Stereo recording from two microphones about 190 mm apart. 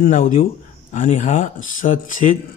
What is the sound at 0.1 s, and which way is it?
A man's voice, 40° left (ahead or behind).